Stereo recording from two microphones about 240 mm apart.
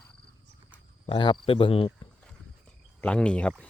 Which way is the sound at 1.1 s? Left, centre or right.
Left.